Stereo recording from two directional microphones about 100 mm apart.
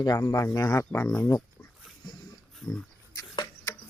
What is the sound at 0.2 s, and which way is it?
Speech, 30° left (ahead or behind).